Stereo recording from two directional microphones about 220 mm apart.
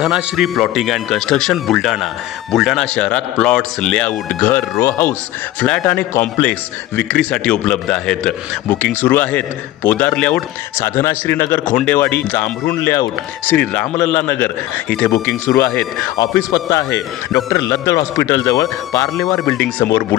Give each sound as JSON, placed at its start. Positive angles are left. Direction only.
{"t": 0.0, "sound": "a man's voice", "side_deg": 0}
{"t": 19.4, "sound": "a man's voice", "side_deg": 5}